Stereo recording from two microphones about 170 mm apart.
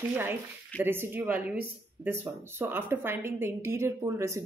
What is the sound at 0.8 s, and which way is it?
Speech, 10° right (ahead or behind).